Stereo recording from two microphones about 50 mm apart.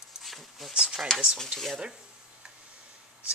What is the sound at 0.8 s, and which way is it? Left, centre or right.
Speech, centre.